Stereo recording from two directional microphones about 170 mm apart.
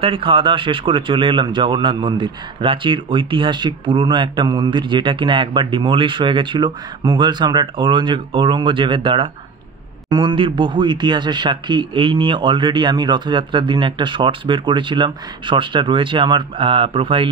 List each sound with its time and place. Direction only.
0.0 s speech: 30° right (ahead or behind)